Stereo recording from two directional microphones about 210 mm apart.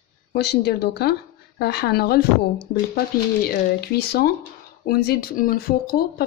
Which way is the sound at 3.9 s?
50° left (ahead or behind).